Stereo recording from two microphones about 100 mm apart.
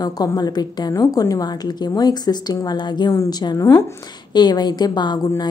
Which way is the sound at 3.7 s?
25° left (ahead or behind).